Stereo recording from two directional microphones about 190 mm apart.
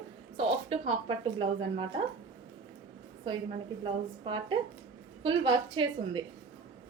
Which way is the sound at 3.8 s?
25° right (ahead or behind).